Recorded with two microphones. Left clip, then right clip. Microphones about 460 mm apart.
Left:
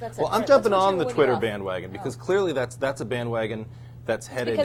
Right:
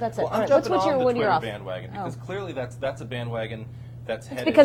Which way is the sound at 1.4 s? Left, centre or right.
Left.